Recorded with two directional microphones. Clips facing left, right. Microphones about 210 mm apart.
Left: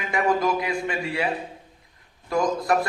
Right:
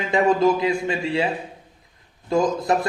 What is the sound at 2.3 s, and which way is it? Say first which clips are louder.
Speech: right 2 dB; 25° right (ahead or behind).